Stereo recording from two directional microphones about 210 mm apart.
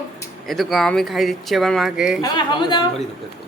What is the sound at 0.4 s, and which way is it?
Speech, centre (ahead or behind).